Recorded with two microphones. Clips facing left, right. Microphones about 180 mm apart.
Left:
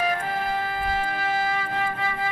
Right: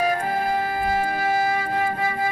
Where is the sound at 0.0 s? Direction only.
40° right (ahead or behind).